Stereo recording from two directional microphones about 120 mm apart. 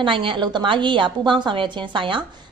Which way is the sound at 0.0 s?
45° right (ahead or behind).